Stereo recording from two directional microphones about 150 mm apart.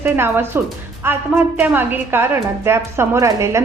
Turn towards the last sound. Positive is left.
turn(degrees=-20)  # may be behind; listen again after turning